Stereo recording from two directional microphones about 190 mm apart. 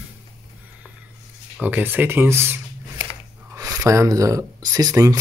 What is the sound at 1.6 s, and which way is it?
Speech, 10° right (ahead or behind).